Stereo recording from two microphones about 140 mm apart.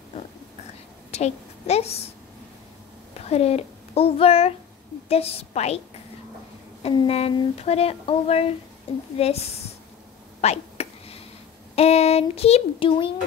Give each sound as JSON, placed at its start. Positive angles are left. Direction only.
{"t": 1.1, "sound": "a woman's voice", "side_deg": 50}
{"t": 3.2, "sound": "a child's voice", "side_deg": 50}
{"t": 6.8, "sound": "speech", "side_deg": 45}
{"t": 10.4, "sound": "a sound", "side_deg": 50}
{"t": 11.7, "sound": "speech", "side_deg": 50}